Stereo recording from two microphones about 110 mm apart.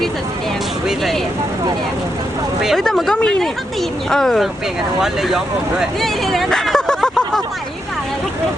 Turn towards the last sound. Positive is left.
turn(degrees=5)  # may be behind; listen again after turning